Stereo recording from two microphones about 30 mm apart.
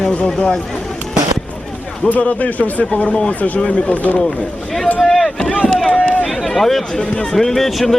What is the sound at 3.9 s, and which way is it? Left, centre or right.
Speech, left.